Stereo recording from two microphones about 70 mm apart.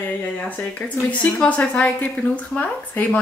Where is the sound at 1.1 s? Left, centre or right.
Centre.